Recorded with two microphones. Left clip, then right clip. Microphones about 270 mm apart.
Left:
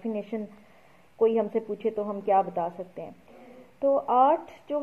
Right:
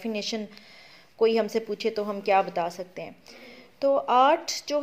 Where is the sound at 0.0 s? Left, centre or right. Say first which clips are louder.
Right 2 dB; right.